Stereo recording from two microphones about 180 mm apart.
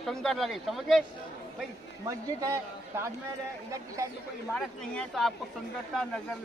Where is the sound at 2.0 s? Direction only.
15° right (ahead or behind).